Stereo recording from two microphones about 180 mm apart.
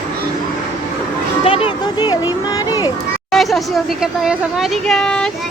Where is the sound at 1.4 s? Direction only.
30° left (ahead or behind).